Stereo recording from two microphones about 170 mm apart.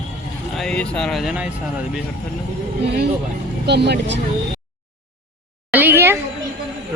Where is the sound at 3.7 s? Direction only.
85° right.